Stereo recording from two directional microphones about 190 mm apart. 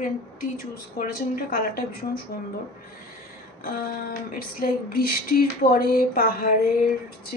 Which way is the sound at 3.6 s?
50° left (ahead or behind).